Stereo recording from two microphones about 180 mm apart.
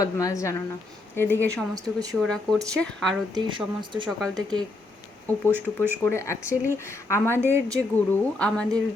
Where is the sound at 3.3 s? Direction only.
25° right (ahead or behind).